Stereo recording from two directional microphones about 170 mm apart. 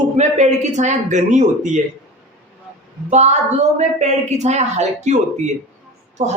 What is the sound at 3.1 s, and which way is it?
Speech, 40° right (ahead or behind).